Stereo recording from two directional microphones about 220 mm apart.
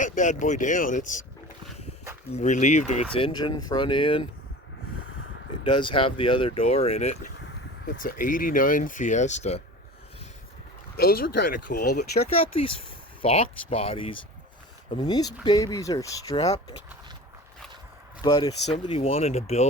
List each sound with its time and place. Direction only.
0.0 s speech: 35° left (ahead or behind)
2.3 s speech: 35° left (ahead or behind)
5.6 s speech: 20° left (ahead or behind)
10.9 s speech: 45° left (ahead or behind)
13.2 s speech: 30° left (ahead or behind)
18.2 s speech: 15° left (ahead or behind)